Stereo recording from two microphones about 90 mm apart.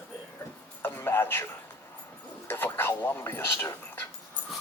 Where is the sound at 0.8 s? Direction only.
25° left (ahead or behind).